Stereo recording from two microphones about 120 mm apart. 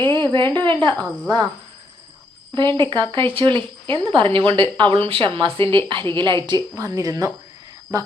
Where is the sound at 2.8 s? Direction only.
40° right (ahead or behind).